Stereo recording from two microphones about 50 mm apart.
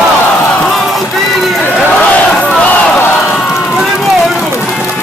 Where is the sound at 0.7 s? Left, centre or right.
Centre.